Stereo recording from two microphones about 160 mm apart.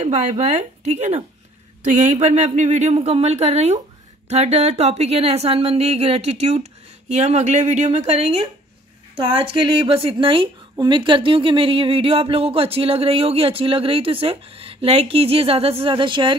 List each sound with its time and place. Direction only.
0.0 s speech: 45° right (ahead or behind)